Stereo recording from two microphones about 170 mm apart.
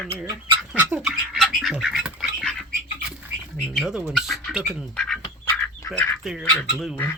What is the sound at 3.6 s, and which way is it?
Speech, centre (ahead or behind).